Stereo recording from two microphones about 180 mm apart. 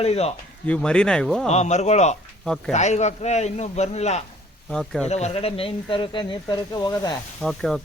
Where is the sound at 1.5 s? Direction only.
40° left (ahead or behind).